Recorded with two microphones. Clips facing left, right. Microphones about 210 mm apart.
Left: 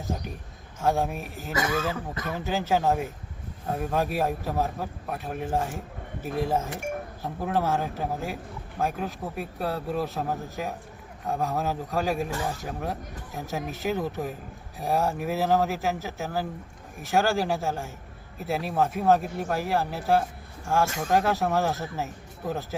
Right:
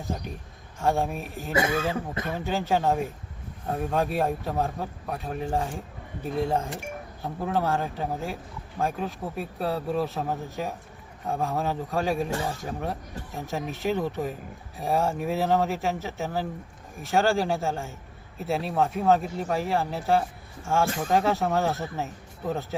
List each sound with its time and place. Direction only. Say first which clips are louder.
0.8 s a man's voice: even; centre (ahead or behind)
1.5 s a man's voice: right 2 dB; 25° right (ahead or behind)
2.2 s a man's voice: left 2 dB; centre (ahead or behind)